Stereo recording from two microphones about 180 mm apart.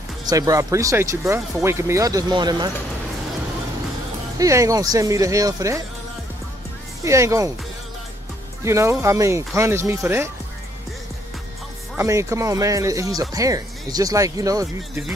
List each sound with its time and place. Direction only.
0.2 s speech: 20° right (ahead or behind)
4.4 s speech: 15° right (ahead or behind)
7.1 s speech: 15° right (ahead or behind)
8.6 s speech: 15° right (ahead or behind)
12.0 s speech: 15° right (ahead or behind)